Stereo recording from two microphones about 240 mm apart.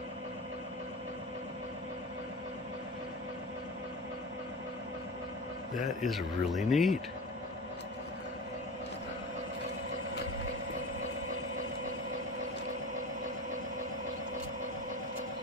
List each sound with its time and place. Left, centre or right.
6.0 s speech: centre